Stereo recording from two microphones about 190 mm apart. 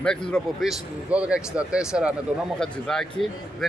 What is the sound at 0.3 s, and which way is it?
Speech, centre (ahead or behind).